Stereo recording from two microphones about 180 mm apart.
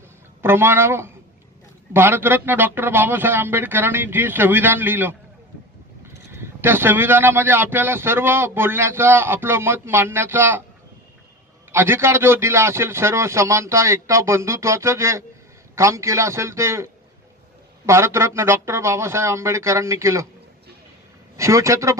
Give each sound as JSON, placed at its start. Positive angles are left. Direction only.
{"t": 0.4, "sound": "speech", "side_deg": -15}
{"t": 6.3, "sound": "speech", "side_deg": -15}
{"t": 11.7, "sound": "speech", "side_deg": -15}
{"t": 21.3, "sound": "speech", "side_deg": -15}